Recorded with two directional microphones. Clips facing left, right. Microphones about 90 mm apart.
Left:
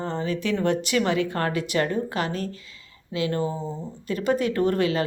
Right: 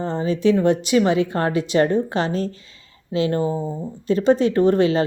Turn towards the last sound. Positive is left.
turn(degrees=-25)  # may be behind; listen again after turning